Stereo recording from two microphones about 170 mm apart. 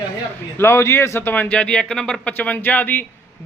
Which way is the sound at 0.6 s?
15° left (ahead or behind).